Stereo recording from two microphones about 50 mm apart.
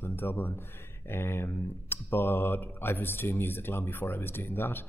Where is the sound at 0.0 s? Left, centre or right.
Left.